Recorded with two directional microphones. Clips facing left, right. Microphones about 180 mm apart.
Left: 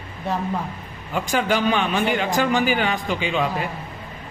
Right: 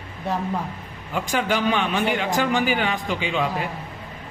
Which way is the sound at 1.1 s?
40° left (ahead or behind).